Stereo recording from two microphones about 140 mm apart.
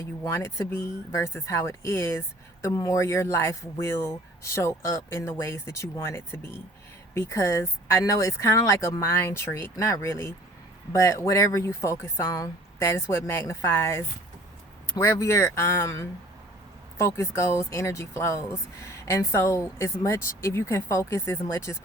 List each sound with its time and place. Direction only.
0.2 s speech: 20° left (ahead or behind)